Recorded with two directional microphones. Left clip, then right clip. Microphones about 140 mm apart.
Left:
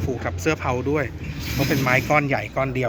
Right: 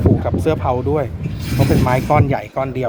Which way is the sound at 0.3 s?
20° right (ahead or behind).